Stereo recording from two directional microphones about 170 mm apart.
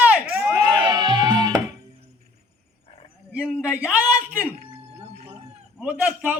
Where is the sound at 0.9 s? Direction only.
25° right (ahead or behind).